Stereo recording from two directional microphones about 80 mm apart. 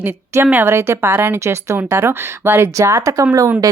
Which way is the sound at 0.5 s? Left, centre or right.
Right.